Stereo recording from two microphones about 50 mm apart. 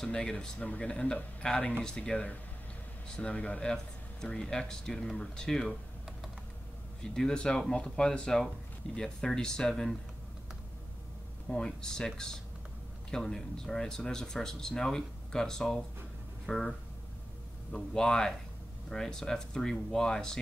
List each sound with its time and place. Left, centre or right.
0.0 s speech: centre
7.0 s speech: centre
11.5 s speech: centre
13.1 s speech: centre
17.7 s speech: centre